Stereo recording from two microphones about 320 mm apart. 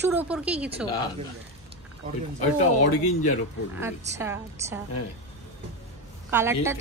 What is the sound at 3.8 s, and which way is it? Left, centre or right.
A woman's voice, centre.